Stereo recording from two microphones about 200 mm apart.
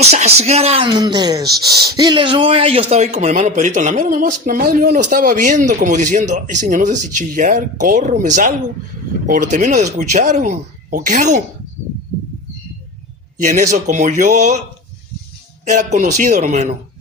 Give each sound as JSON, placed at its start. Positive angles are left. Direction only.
{"t": 0.1, "sound": "speech", "side_deg": -30}
{"t": 13.4, "sound": "speech", "side_deg": -40}
{"t": 15.6, "sound": "speech", "side_deg": -35}